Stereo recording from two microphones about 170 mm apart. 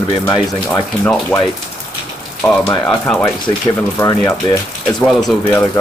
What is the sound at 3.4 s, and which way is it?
Speech, 20° left (ahead or behind).